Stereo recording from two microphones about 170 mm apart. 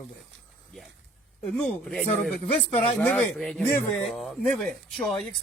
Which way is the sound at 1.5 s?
5° left (ahead or behind).